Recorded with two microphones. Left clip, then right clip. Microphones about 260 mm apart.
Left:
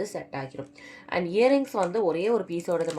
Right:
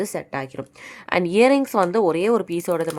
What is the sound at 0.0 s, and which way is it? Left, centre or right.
Speech, right.